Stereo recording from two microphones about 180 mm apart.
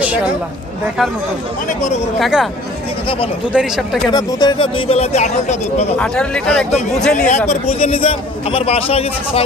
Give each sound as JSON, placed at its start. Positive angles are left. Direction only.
{"t": 1.7, "sound": "a man's voice", "side_deg": 40}
{"t": 2.1, "sound": "speech", "side_deg": 0}
{"t": 3.5, "sound": "speech", "side_deg": -5}
{"t": 4.1, "sound": "a man's voice", "side_deg": 20}
{"t": 5.9, "sound": "speech", "side_deg": 5}
{"t": 7.2, "sound": "a man's voice", "side_deg": 40}